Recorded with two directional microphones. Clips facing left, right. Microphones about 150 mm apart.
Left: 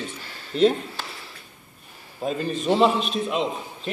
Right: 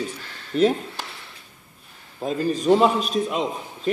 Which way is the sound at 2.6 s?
Centre (ahead or behind).